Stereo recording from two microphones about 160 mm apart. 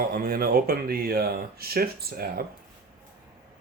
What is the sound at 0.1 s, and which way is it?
Speech, 70° right (ahead or behind).